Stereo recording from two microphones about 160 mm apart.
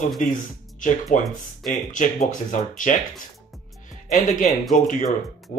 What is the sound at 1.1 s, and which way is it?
Speech, 55° left (ahead or behind).